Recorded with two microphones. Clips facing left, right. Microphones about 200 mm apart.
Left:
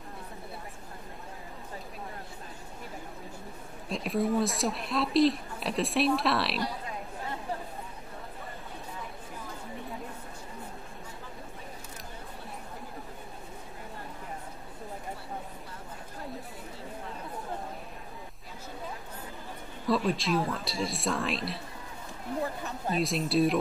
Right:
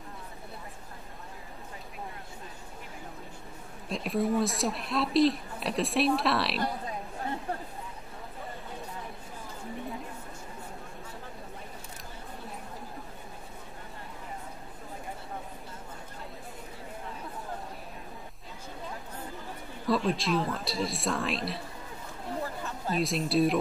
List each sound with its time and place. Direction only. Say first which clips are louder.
3.9 s speech: even; centre (ahead or behind)
19.9 s speech: even; centre (ahead or behind)
22.6 s a woman's voice: left 1 dB; 15° left (ahead or behind)
22.9 s speech: even; centre (ahead or behind)